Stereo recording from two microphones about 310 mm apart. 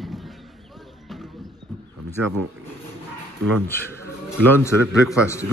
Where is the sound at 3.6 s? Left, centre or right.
Centre.